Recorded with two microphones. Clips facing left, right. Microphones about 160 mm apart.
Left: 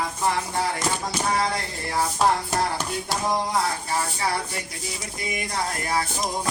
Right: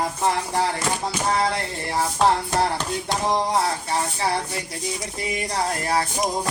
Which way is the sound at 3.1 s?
25° right (ahead or behind).